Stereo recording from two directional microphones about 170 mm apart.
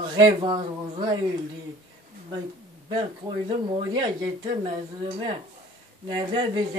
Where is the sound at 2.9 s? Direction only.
25° right (ahead or behind).